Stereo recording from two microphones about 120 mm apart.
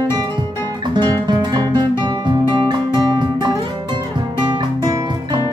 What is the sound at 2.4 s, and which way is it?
Music, 40° right (ahead or behind).